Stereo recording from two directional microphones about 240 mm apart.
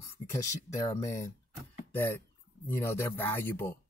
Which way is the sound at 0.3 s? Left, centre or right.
Centre.